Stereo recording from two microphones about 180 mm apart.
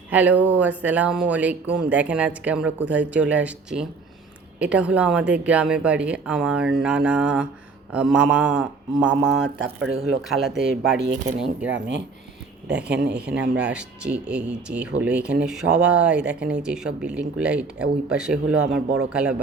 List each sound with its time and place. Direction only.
0.1 s speech: 10° right (ahead or behind)
10.9 s speech: 70° right (ahead or behind)
12.7 s speech: 70° right (ahead or behind)
13.3 s speech: 80° right
13.6 s speech: 5° right (ahead or behind)